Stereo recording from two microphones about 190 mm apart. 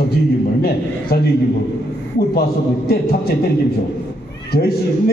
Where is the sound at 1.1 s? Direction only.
55° left (ahead or behind).